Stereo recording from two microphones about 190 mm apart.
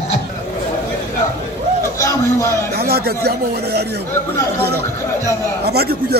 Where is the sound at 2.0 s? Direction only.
15° left (ahead or behind).